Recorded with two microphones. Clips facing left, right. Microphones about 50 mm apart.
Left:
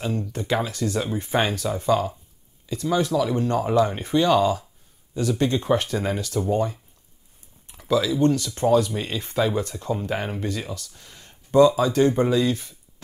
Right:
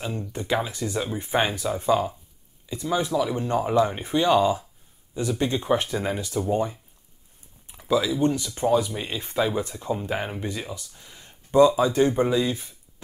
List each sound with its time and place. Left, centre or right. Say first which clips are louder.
0.2 s speech: left 1 dB; centre